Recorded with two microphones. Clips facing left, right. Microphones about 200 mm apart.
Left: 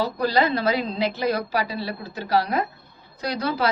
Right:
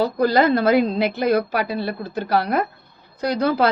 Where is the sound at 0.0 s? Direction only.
50° right (ahead or behind).